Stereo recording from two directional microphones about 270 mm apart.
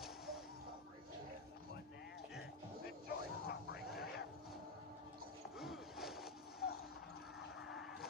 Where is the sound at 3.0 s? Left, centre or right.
Left.